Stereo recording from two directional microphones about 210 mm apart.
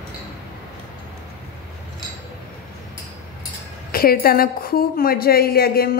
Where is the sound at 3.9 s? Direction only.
45° left (ahead or behind).